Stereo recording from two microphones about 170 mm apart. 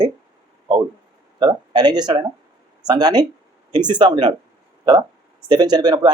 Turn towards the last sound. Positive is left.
turn(degrees=-25)  # may be behind; listen again after turning